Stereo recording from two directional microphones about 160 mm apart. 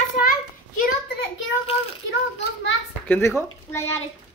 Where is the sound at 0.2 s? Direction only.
65° left (ahead or behind).